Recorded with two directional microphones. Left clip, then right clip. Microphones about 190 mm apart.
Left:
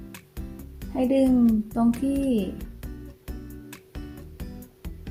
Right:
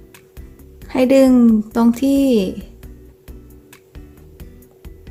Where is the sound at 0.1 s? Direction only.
Centre (ahead or behind).